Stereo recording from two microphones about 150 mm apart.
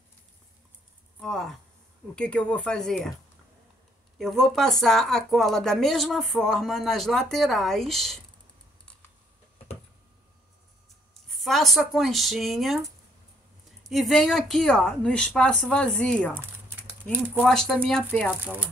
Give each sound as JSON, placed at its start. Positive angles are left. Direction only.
{"t": 1.2, "sound": "speech", "side_deg": 5}
{"t": 4.2, "sound": "speech", "side_deg": 0}
{"t": 11.2, "sound": "speech", "side_deg": 0}
{"t": 16.3, "sound": "a sound", "side_deg": -15}
{"t": 17.4, "sound": "speech", "side_deg": 0}
{"t": 18.4, "sound": "speech", "side_deg": -10}